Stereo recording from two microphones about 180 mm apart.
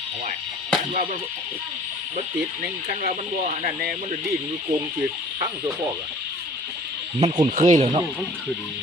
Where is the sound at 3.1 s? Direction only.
40° right (ahead or behind).